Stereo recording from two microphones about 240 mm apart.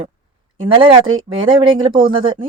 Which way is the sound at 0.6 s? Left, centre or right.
Right.